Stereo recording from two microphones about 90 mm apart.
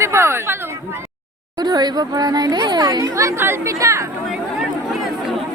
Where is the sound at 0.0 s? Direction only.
30° right (ahead or behind).